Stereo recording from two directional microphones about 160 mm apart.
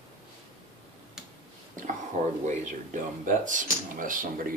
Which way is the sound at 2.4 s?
50° right (ahead or behind).